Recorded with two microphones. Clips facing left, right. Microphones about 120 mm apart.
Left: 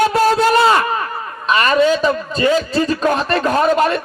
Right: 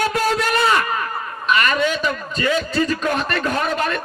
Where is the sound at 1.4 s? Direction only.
35° left (ahead or behind).